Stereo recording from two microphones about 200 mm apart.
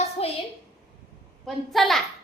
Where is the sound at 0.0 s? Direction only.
30° left (ahead or behind).